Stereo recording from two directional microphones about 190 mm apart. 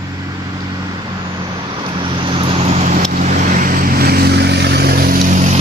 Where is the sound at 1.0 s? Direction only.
20° right (ahead or behind).